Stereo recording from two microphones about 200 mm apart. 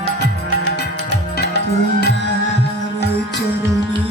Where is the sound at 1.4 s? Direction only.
55° left (ahead or behind).